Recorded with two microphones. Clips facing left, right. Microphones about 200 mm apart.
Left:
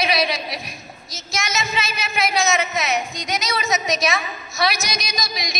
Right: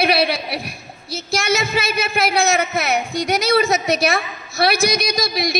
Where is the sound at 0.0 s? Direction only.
60° right (ahead or behind).